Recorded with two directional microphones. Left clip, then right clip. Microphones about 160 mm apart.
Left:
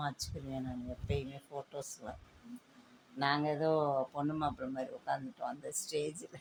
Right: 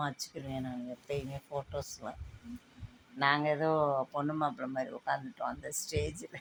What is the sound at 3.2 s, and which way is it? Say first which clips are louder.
Speech: right 4 dB; 5° right (ahead or behind).